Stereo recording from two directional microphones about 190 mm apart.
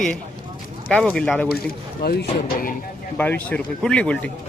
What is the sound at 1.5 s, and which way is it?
Speech, 55° left (ahead or behind).